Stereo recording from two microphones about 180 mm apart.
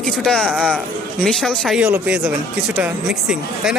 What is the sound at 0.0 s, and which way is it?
Speech, 5° left (ahead or behind).